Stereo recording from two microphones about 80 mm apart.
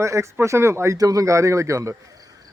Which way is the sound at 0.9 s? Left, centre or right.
Right.